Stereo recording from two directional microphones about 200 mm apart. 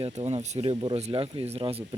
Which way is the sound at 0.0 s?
30° right (ahead or behind).